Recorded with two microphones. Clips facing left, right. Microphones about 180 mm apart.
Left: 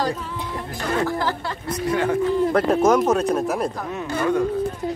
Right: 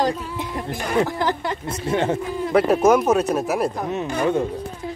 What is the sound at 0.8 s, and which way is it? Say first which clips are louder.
Speech: right 1 dB; 15° right (ahead or behind).